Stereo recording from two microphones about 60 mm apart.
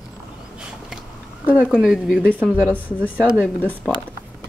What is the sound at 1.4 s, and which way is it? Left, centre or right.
Speech, centre.